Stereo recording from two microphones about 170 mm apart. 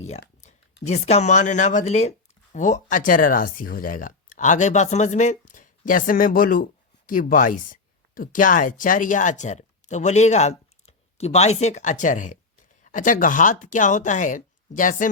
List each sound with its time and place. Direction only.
0.9 s speech: 40° left (ahead or behind)